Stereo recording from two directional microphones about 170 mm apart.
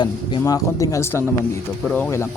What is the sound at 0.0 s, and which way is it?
Speech, 20° left (ahead or behind).